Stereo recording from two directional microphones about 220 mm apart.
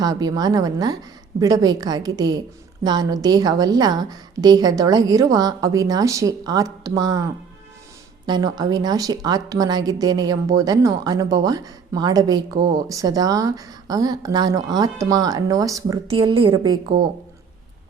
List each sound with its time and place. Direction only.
0.0 s a woman's voice: 15° right (ahead or behind)
8.3 s a woman's voice: 20° right (ahead or behind)